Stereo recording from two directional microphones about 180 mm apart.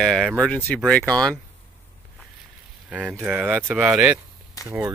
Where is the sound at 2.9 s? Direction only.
10° right (ahead or behind).